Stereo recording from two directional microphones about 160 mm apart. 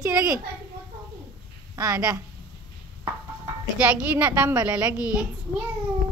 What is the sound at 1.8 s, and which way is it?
Speech, 25° right (ahead or behind).